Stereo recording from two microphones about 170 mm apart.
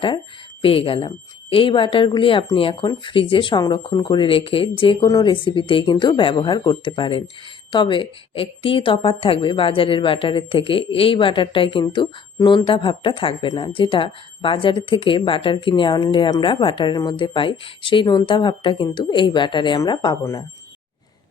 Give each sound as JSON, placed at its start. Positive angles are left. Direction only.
{"t": 0.6, "sound": "a woman's voice", "side_deg": 30}